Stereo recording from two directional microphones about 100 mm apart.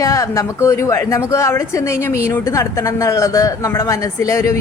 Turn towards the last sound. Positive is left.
turn(degrees=30)  # may be behind; listen again after turning